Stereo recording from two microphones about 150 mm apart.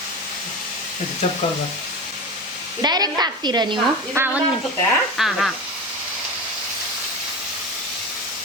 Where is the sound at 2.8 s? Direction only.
25° right (ahead or behind).